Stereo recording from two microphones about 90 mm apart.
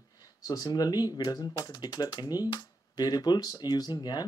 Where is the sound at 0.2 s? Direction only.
45° left (ahead or behind).